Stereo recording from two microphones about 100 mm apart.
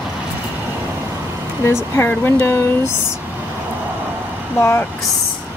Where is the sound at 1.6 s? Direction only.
25° left (ahead or behind).